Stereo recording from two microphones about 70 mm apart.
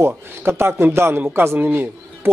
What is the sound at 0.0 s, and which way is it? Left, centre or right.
A man's voice, right.